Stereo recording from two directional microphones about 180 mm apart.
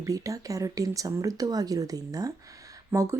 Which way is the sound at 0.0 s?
20° right (ahead or behind).